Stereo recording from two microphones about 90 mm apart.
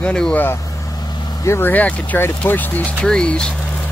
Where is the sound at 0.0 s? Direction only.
10° left (ahead or behind).